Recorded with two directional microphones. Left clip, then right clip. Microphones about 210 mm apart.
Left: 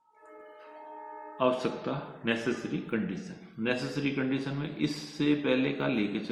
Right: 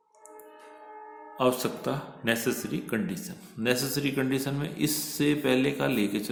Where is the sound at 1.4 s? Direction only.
60° right (ahead or behind).